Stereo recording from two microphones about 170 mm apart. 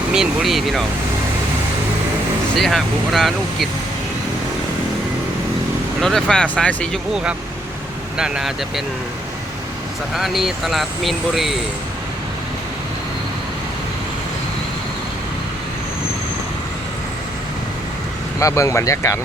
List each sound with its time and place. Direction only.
0.1 s speech: 5° right (ahead or behind)
2.6 s speech: centre (ahead or behind)
6.0 s speech: centre (ahead or behind)
10.2 s speech: centre (ahead or behind)
18.3 s speech: 20° left (ahead or behind)